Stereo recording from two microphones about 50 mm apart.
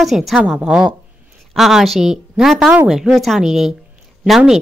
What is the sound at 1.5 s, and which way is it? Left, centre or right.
Speech, centre.